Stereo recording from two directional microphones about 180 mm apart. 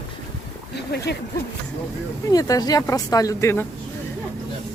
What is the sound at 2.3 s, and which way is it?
Speech, 20° left (ahead or behind).